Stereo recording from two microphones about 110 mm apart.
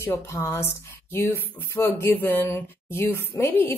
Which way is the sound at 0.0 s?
25° left (ahead or behind).